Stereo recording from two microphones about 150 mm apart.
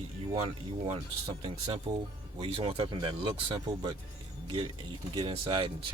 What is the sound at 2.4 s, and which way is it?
Speech, 40° right (ahead or behind).